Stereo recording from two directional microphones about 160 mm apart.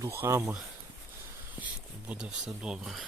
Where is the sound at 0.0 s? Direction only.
15° right (ahead or behind).